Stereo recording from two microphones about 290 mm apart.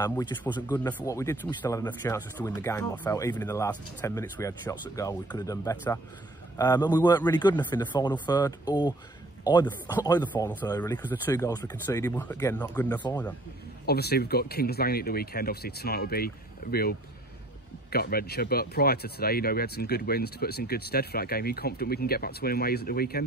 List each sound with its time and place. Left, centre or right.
0.0 s speech: centre
13.8 s speech: left
17.9 s speech: left